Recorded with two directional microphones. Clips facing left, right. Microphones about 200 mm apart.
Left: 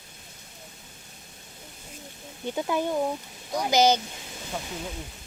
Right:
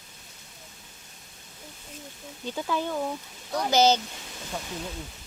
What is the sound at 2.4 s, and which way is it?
A woman's voice, 15° left (ahead or behind).